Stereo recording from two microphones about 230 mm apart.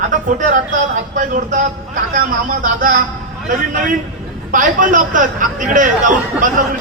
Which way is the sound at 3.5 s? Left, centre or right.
Right.